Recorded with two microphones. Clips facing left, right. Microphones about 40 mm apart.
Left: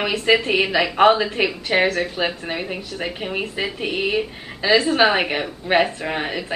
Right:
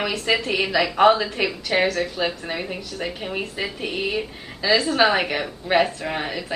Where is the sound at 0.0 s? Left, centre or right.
Centre.